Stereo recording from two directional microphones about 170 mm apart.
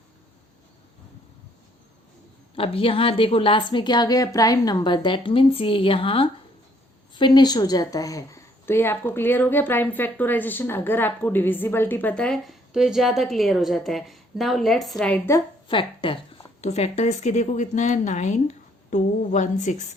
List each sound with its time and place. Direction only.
2.6 s a woman's voice: 35° left (ahead or behind); by 15.4 s 10° left (ahead or behind)
15.7 s a woman's voice: 30° left (ahead or behind); by 19.7 s 45° left (ahead or behind)